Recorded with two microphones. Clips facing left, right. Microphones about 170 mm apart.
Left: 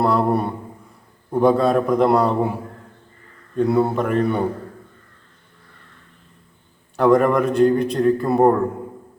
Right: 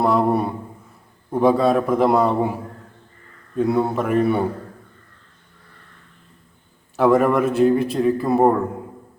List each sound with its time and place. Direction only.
0.0 s a man's voice: centre (ahead or behind)
3.6 s a man's voice: centre (ahead or behind)
6.9 s a man's voice: 5° right (ahead or behind)